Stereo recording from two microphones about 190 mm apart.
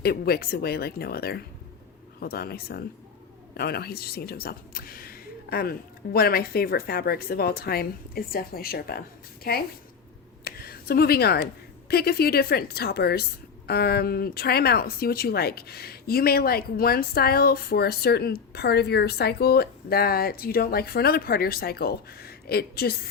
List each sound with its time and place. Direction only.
0.0 s a woman's voice: 55° left (ahead or behind)
10.4 s a sound: 50° left (ahead or behind)
11.9 s a woman's voice: 55° left (ahead or behind)